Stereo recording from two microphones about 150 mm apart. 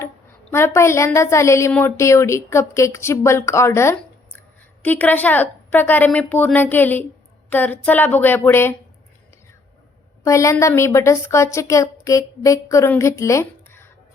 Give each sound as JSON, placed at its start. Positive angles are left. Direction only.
{"t": 0.5, "sound": "a woman's voice", "side_deg": 15}
{"t": 10.2, "sound": "a woman's voice", "side_deg": 20}